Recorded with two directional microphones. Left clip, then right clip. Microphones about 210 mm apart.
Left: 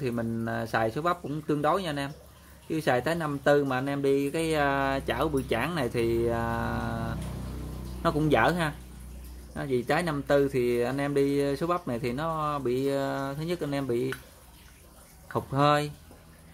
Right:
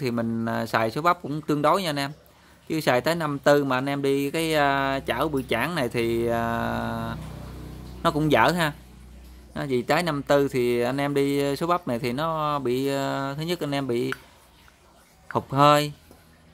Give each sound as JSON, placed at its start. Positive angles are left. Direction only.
{"t": 0.0, "sound": "speech", "side_deg": -35}
{"t": 15.3, "sound": "speech", "side_deg": -35}